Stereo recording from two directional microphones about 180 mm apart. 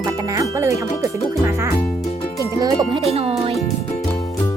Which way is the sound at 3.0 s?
35° right (ahead or behind).